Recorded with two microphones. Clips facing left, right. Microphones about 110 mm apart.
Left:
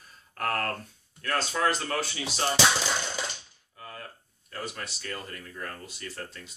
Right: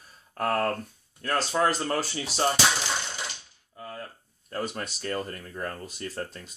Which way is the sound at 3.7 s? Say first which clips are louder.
Right 4 dB; 30° right (ahead or behind).